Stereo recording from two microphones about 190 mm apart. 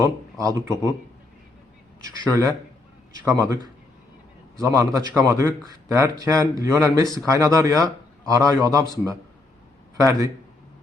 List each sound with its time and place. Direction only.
0.0 s speech: 15° right (ahead or behind)
2.0 s speech: 15° right (ahead or behind)
10.0 s speech: 15° right (ahead or behind)